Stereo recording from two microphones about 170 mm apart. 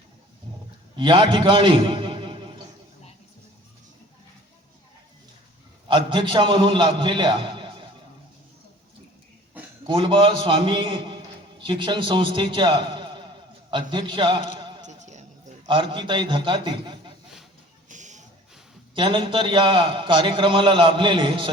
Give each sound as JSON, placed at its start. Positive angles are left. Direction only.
{"t": 0.9, "sound": "a man's voice", "side_deg": -30}
{"t": 6.1, "sound": "a man's voice", "side_deg": -30}
{"t": 9.8, "sound": "a man's voice", "side_deg": -30}
{"t": 14.6, "sound": "a sound", "side_deg": -30}
{"t": 14.8, "sound": "music", "side_deg": -45}
{"t": 15.6, "sound": "a man's voice", "side_deg": -30}
{"t": 17.8, "sound": "music", "side_deg": -45}
{"t": 18.9, "sound": "a man's voice", "side_deg": -30}